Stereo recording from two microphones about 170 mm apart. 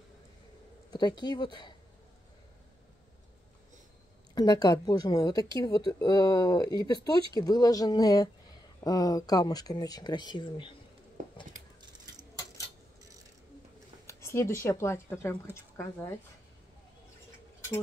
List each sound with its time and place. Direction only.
0.9 s speech: 25° left (ahead or behind)
4.4 s speech: 25° left (ahead or behind)
14.0 s speech: 15° left (ahead or behind)